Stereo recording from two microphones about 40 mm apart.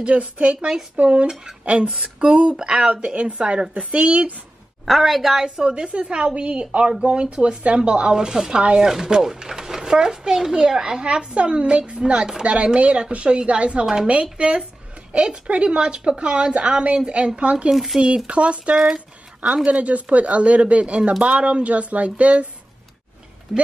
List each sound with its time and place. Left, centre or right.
0.0 s speech: right
4.8 s a woman's voice: centre
5.6 s speech: right
12.5 s speech: right
17.7 s speech: centre
18.0 s speech: right
18.8 s speech: centre
19.4 s speech: right